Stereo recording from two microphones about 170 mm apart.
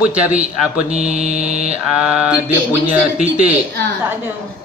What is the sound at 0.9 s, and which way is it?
Mantra, 40° right (ahead or behind).